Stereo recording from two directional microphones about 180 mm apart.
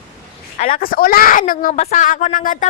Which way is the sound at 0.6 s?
50° left (ahead or behind).